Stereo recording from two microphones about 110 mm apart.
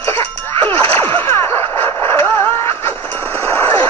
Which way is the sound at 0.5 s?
20° left (ahead or behind).